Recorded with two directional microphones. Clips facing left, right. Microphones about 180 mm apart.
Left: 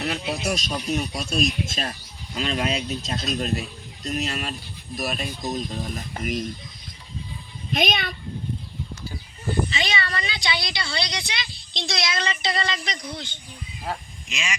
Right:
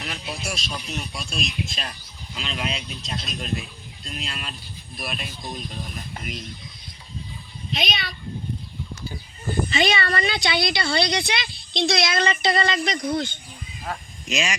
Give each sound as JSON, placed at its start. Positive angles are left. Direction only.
{"t": 0.0, "sound": "speech", "side_deg": 35}
{"t": 7.7, "sound": "speech", "side_deg": 55}
{"t": 9.6, "sound": "speech", "side_deg": -55}
{"t": 14.3, "sound": "speech", "side_deg": -40}